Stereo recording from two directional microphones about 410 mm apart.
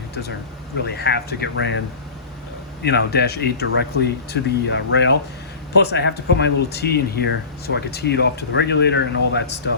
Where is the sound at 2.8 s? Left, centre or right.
Left.